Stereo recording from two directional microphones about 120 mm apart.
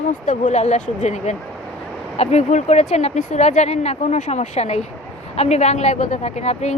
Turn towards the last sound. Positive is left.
turn(degrees=65)  # may be behind; listen again after turning